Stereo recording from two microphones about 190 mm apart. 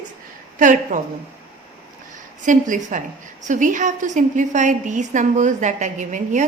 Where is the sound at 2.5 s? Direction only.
40° right (ahead or behind).